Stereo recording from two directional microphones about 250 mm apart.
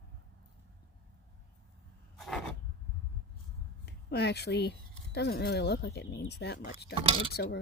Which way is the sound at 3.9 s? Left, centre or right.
Left.